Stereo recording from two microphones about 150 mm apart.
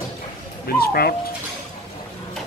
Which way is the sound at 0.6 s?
90° left.